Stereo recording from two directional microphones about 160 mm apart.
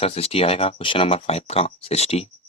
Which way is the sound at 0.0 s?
40° left (ahead or behind).